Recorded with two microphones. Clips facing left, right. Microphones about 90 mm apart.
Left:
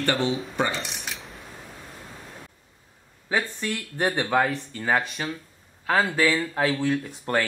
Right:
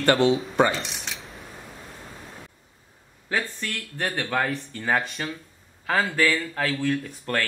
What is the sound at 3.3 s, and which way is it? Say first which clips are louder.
A man's voice: left 2 dB; 15° left (ahead or behind).